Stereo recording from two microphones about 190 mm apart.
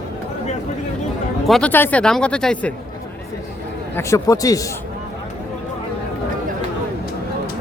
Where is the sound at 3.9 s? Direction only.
15° left (ahead or behind).